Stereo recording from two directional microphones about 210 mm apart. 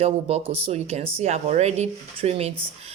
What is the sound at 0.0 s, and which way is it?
Speech, 30° right (ahead or behind).